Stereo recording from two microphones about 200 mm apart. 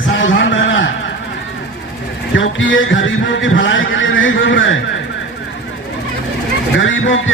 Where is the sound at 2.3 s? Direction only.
70° left (ahead or behind).